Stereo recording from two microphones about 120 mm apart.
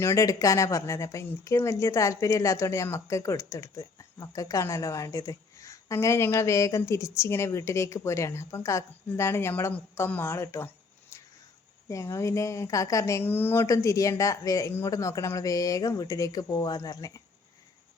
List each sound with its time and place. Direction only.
0.0 s speech: 25° left (ahead or behind)
11.1 s a sound: 25° left (ahead or behind)
11.9 s speech: 25° left (ahead or behind)